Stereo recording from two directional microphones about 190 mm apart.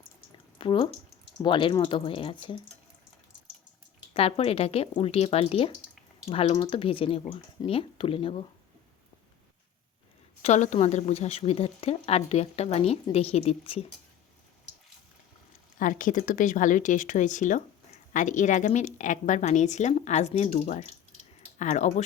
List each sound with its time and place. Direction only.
0.6 s speech: 25° left (ahead or behind)
4.1 s a woman's voice: 30° left (ahead or behind)
10.4 s a woman's voice: 40° left (ahead or behind)
15.8 s a woman's voice: 45° left (ahead or behind)